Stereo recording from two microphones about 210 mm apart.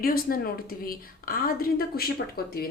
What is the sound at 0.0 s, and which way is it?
A woman's voice, 45° left (ahead or behind).